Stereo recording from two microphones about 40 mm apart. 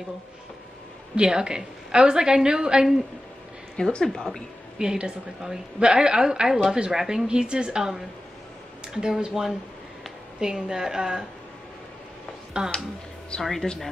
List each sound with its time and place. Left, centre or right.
1.1 s speech: right
4.0 s speech: centre
4.7 s a woman's voice: centre
12.6 s speech: right
13.4 s speech: centre